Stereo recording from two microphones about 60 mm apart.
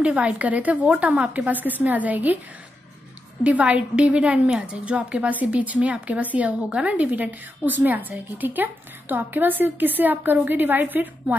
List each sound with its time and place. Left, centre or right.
0.0 s a woman's voice: right
3.4 s a woman's voice: right